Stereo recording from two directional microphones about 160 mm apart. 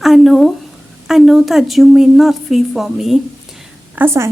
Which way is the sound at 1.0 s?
Centre (ahead or behind).